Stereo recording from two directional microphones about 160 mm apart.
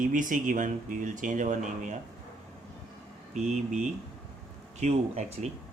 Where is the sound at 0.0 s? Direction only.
55° right (ahead or behind).